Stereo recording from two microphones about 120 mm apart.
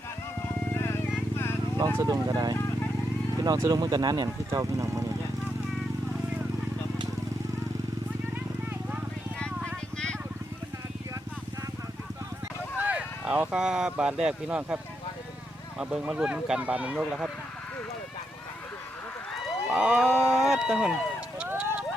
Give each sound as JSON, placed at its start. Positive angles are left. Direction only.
{"t": 0.4, "sound": "a sound", "side_deg": 20}
{"t": 1.8, "sound": "speech", "side_deg": -30}
{"t": 9.6, "sound": "vehicle", "side_deg": 5}
{"t": 12.8, "sound": "speech", "side_deg": -10}
{"t": 15.8, "sound": "speech", "side_deg": -5}
{"t": 17.0, "sound": "speech", "side_deg": 0}
{"t": 19.7, "sound": "speech", "side_deg": -5}
{"t": 21.3, "sound": "a sound", "side_deg": -15}